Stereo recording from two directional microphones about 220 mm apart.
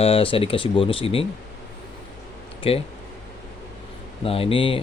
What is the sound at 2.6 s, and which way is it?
Speech, 25° left (ahead or behind).